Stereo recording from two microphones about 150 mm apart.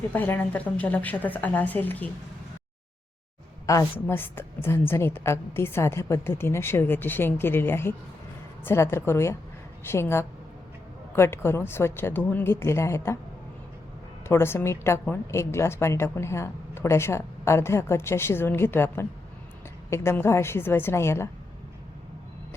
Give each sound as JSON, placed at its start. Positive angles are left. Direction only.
{"t": 0.1, "sound": "a woman's voice", "side_deg": 10}
{"t": 3.7, "sound": "a woman's voice", "side_deg": 20}
{"t": 14.3, "sound": "a woman's voice", "side_deg": 15}